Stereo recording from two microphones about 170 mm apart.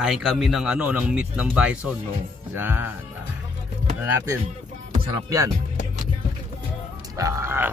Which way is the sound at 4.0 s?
15° right (ahead or behind).